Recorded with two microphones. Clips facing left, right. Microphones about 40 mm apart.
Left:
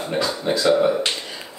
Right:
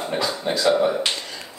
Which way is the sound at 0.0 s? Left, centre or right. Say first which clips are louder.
Left 1 dB; centre.